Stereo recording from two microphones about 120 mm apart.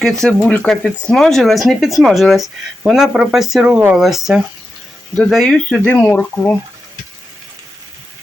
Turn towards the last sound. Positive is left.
turn(degrees=15)  # may be behind; listen again after turning